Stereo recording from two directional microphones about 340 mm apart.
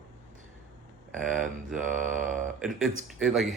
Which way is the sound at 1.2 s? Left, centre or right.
Right.